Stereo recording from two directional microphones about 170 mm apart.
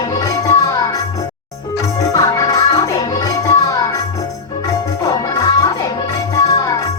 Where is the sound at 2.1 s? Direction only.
20° left (ahead or behind).